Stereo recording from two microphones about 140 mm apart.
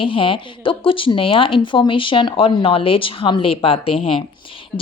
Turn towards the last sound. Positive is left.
turn(degrees=40)  # may be behind; listen again after turning